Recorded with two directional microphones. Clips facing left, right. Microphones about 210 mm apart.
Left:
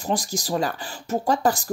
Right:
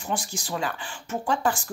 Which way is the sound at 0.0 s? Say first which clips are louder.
Left 5 dB; 40° left (ahead or behind).